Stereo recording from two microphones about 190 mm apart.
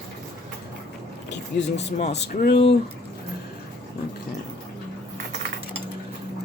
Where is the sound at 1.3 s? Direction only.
65° left (ahead or behind).